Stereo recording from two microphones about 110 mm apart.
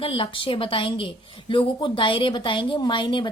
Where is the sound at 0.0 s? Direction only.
55° left (ahead or behind).